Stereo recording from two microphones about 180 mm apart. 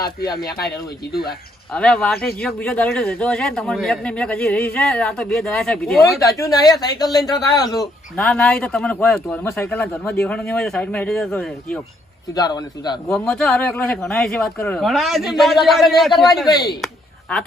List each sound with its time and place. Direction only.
1.1 s speech: 60° left (ahead or behind)
1.7 s a man's voice: 5° left (ahead or behind)
6.1 s a man's voice: 20° left (ahead or behind)
8.1 s a man's voice: 5° left (ahead or behind)
12.3 s a man's voice: 20° left (ahead or behind)
13.1 s a man's voice: 5° left (ahead or behind)
16.5 s a man's voice: 20° left (ahead or behind)
16.8 s a sound: 5° left (ahead or behind)